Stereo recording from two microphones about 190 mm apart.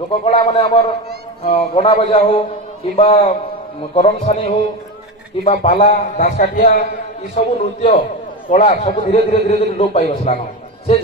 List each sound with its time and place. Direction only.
0.2 s a man's voice: 30° left (ahead or behind); by 6.8 s 45° left (ahead or behind)
7.3 s a man's voice: 35° left (ahead or behind)